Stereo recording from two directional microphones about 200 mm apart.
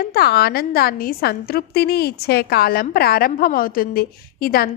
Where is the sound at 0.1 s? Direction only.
50° left (ahead or behind).